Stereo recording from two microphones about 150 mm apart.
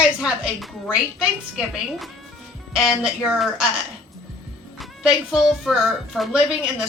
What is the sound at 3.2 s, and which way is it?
A woman's voice, 5° right (ahead or behind).